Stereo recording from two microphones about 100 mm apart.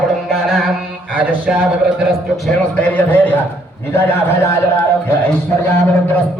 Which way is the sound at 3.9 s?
25° left (ahead or behind).